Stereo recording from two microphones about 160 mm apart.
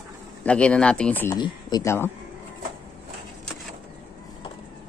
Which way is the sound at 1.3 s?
25° left (ahead or behind).